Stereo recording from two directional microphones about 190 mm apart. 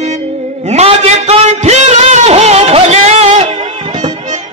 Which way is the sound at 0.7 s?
35° right (ahead or behind).